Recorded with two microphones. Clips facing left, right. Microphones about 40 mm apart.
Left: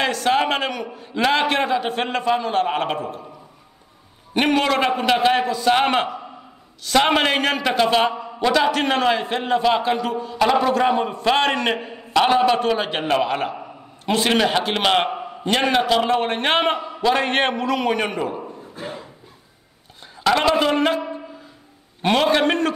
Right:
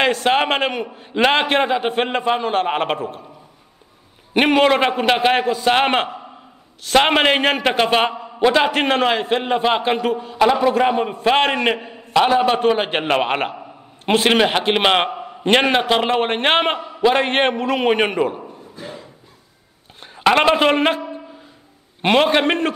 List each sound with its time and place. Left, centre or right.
0.0 s a man's voice: right
4.3 s a man's voice: right
10.4 s a man's voice: centre
10.7 s a man's voice: right
14.4 s a man's voice: right
15.4 s a man's voice: right
20.0 s a man's voice: right
22.0 s a man's voice: right